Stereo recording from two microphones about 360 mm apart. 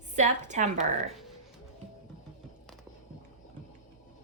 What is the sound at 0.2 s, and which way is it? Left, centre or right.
Speech, centre.